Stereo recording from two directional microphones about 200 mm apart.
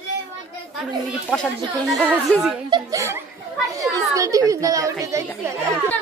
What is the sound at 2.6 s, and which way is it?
A child's voice, 20° right (ahead or behind).